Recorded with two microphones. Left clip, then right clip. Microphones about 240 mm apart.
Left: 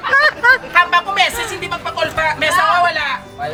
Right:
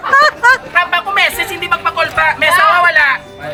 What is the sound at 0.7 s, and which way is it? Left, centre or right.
Speech, centre.